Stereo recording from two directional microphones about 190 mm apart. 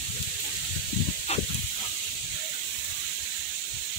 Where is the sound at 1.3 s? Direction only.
35° left (ahead or behind).